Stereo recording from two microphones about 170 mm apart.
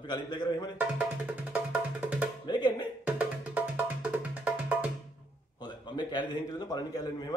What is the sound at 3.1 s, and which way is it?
Music, 10° right (ahead or behind).